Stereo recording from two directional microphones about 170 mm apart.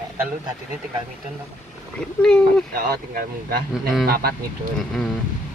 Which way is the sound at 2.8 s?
70° right (ahead or behind).